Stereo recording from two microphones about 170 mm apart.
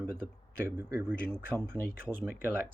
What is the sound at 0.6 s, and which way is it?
Speech, 15° right (ahead or behind).